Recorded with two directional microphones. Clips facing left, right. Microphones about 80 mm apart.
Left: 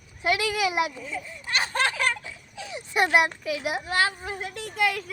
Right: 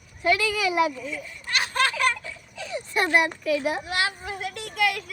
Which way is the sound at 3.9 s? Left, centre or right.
Left.